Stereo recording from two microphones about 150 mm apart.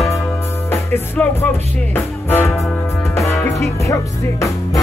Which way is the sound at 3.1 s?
15° left (ahead or behind).